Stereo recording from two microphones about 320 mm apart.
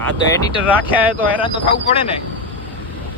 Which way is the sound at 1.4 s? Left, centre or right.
Centre.